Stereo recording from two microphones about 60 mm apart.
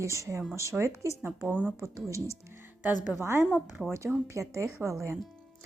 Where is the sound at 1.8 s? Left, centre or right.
Right.